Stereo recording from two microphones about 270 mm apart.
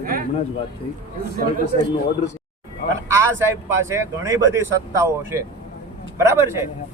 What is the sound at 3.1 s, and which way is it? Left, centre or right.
Speech, centre.